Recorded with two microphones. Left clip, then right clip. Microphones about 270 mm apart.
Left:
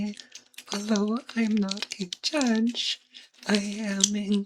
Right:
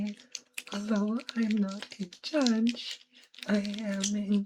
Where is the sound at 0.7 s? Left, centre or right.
Centre.